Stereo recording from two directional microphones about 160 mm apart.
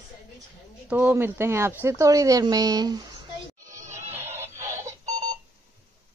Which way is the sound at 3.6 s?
50° right (ahead or behind).